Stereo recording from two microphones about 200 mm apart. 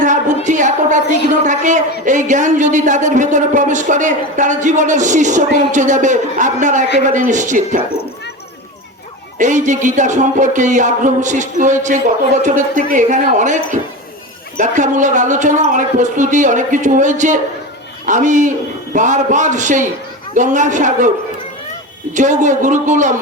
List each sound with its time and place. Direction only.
0.0 s a sound: 40° right (ahead or behind)
0.4 s a woman's voice: 40° right (ahead or behind)
9.4 s speech: 40° right (ahead or behind)
14.6 s speech: 40° right (ahead or behind)
22.1 s speech: 40° right (ahead or behind)